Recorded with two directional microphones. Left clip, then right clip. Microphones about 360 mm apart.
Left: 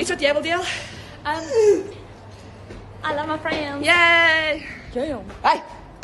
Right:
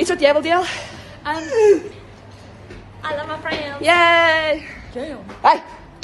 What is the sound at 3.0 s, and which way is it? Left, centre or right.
Speech, centre.